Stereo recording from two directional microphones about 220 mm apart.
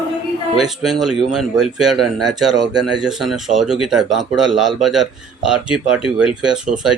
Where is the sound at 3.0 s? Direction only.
Centre (ahead or behind).